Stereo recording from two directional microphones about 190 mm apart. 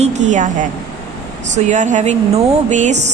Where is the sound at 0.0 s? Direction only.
35° right (ahead or behind).